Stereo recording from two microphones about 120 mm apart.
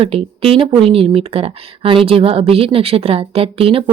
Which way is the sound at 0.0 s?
50° right (ahead or behind).